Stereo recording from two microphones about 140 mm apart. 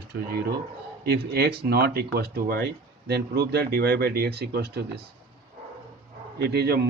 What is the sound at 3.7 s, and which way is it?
Speech, 90° right.